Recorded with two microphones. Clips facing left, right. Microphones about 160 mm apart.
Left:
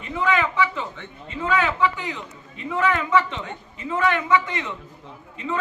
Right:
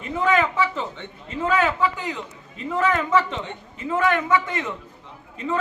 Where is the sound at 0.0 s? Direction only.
40° right (ahead or behind).